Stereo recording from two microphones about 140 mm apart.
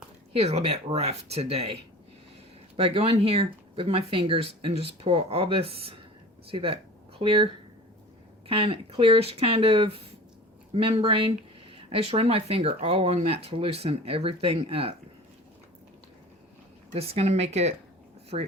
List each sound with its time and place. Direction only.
0.3 s speech: 50° right (ahead or behind)
16.9 s speech: 45° right (ahead or behind)